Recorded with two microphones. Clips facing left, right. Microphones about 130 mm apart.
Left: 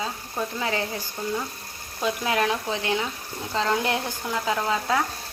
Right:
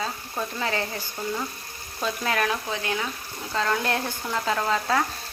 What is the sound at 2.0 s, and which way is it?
Speech, 15° left (ahead or behind).